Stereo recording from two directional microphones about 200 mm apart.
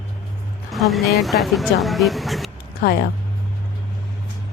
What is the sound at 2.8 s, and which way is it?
Music, 50° left (ahead or behind).